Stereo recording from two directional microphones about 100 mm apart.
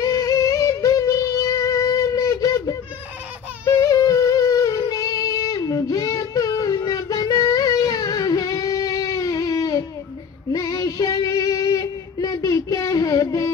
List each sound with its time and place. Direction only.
0.0 s music: 35° left (ahead or behind)
3.6 s humming: 30° left (ahead or behind)
10.5 s female singing: 35° left (ahead or behind)